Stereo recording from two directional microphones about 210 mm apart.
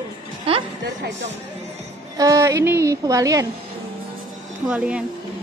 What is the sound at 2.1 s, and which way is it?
A woman's voice, 15° right (ahead or behind).